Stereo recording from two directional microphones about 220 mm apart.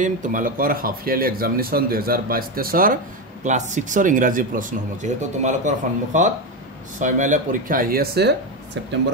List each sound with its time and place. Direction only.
0.0 s speech: 35° right (ahead or behind)